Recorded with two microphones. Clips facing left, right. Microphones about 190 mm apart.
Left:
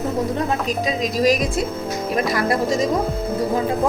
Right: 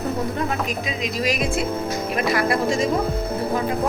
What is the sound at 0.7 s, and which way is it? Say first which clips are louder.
A woman's voice: left 5 dB; 40° left (ahead or behind).